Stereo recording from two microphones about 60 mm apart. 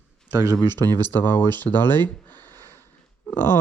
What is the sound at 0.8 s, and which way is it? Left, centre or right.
Speech, left.